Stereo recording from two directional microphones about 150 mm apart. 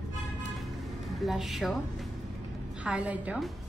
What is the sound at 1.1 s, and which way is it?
A woman's voice, centre (ahead or behind).